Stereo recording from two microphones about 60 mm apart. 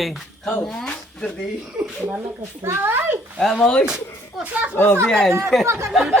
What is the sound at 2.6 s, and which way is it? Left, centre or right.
Speech, right.